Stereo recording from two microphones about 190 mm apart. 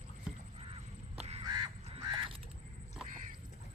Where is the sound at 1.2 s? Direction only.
35° right (ahead or behind).